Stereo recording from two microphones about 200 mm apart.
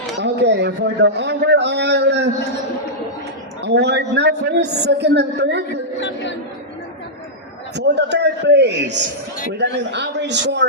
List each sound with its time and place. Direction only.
0.2 s a man's voice: 60° right (ahead or behind)
3.6 s a man's voice: 60° right (ahead or behind)
6.0 s speech: 60° left (ahead or behind)
7.8 s a man's voice: 60° right (ahead or behind)